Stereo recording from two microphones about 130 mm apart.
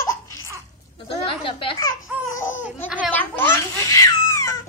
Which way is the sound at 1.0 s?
45° left (ahead or behind).